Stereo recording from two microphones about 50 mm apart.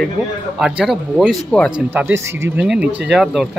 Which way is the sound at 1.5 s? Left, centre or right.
Left.